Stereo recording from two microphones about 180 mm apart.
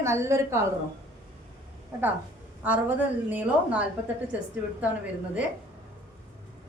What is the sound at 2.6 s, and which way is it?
A woman's voice, 10° right (ahead or behind).